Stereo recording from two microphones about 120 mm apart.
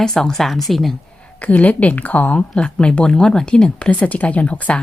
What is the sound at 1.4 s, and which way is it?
Speech, 10° left (ahead or behind).